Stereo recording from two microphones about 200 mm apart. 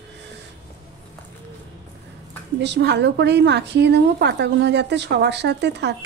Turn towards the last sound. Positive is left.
turn(degrees=-60)  # may be behind; listen again after turning